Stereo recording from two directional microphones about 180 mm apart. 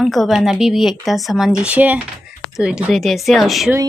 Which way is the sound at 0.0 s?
Centre (ahead or behind).